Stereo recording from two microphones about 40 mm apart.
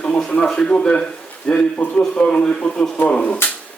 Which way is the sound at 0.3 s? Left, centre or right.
Left.